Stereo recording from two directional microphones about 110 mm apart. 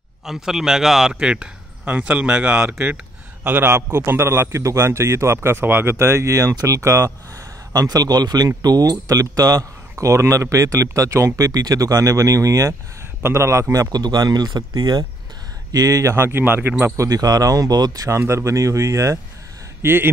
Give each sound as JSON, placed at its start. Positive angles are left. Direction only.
{"t": 0.2, "sound": "a man's voice", "side_deg": -5}